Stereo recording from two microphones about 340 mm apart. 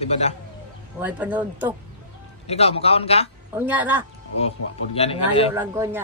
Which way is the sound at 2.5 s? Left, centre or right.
Centre.